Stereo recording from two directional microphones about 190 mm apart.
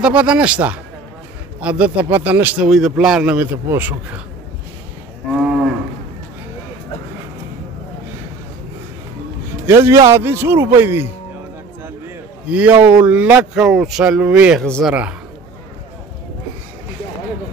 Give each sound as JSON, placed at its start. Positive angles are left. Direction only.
{"t": 0.0, "sound": "speech", "side_deg": -5}
{"t": 9.7, "sound": "speech", "side_deg": -15}
{"t": 12.4, "sound": "speech", "side_deg": -10}